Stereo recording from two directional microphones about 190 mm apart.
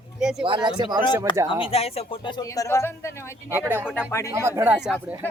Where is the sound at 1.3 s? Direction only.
25° left (ahead or behind).